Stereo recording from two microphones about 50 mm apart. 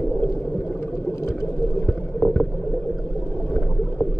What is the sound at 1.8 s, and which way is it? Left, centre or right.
Boat, centre.